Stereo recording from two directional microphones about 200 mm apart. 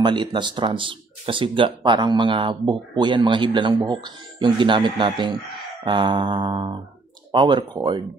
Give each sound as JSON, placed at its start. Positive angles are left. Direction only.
{"t": 0.0, "sound": "speech", "side_deg": -25}